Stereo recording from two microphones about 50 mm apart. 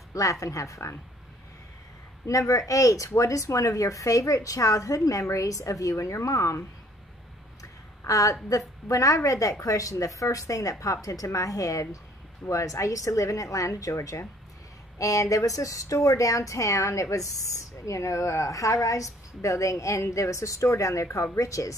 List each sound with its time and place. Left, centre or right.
0.1 s speech: left
2.2 s speech: left
8.5 s speech: left